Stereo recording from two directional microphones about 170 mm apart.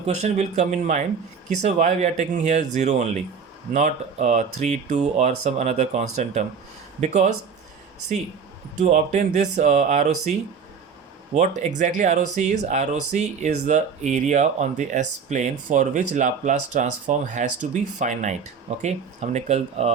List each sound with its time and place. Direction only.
0.0 s speech: 40° right (ahead or behind)
8.8 s speech: 45° right (ahead or behind)
11.3 s speech: 45° right (ahead or behind)